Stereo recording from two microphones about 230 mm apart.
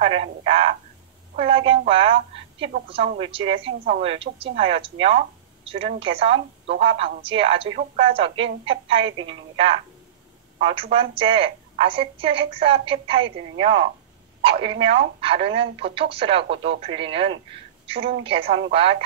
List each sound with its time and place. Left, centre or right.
0.0 s a woman's voice: right